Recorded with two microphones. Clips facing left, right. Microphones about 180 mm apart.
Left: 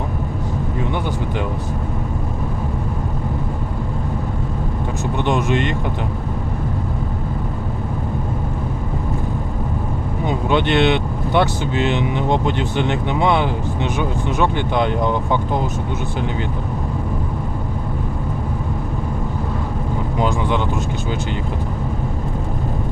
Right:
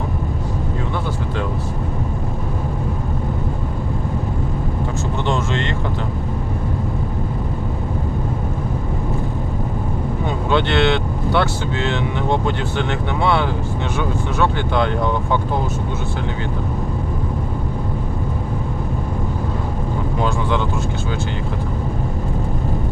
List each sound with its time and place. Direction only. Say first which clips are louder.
5.2 s speech: left 4 dB; 15° left (ahead or behind)
10.2 s speech: left 2 dB; 15° left (ahead or behind)
20.1 s speech: left 1 dB; 20° left (ahead or behind)